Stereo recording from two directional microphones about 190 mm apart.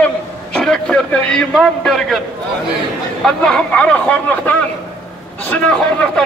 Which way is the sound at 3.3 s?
5° left (ahead or behind).